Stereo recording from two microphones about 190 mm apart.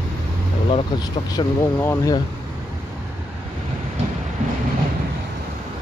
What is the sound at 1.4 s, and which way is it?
Speech, 20° left (ahead or behind).